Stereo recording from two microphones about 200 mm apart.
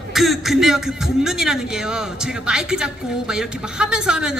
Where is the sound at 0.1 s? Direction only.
Centre (ahead or behind).